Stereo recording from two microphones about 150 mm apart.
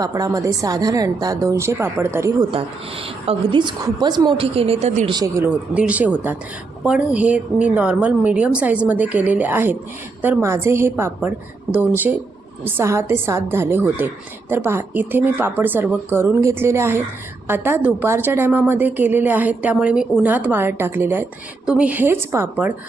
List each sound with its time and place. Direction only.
0.0 s a woman's voice: 25° right (ahead or behind)
2.5 s a woman's voice: 40° right (ahead or behind)
5.1 s a woman's voice: 25° right (ahead or behind)
5.7 s a woman's voice: 10° right (ahead or behind)
12.6 s a woman's voice: 15° right (ahead or behind)